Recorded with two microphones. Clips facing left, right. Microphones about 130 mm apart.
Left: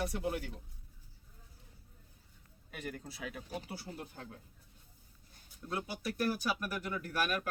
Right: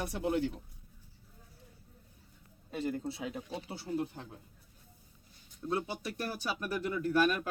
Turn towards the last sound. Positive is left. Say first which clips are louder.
# right 6 dB
turn(degrees=-25)  # may be behind; listen again after turning